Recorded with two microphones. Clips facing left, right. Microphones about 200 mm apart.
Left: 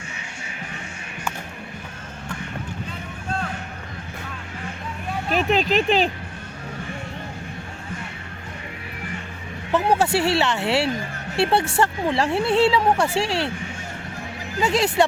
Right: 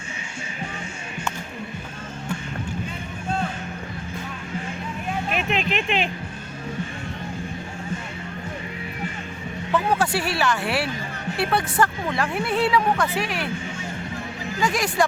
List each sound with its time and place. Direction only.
5.3 s speech: 35° left (ahead or behind)
9.7 s speech: 25° left (ahead or behind)
14.6 s speech: 25° left (ahead or behind)